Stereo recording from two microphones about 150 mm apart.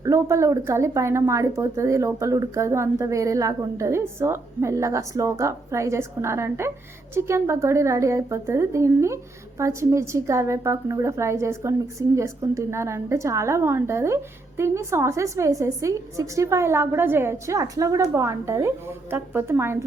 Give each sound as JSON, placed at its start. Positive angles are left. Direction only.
{"t": 0.0, "sound": "a woman's voice", "side_deg": -20}